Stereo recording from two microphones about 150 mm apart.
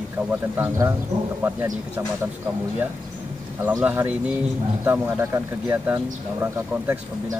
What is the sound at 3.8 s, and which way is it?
Speech, 10° right (ahead or behind).